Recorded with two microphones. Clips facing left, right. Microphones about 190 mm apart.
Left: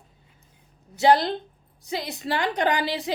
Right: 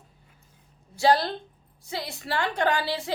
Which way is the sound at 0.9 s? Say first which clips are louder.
Left 3 dB; 20° left (ahead or behind).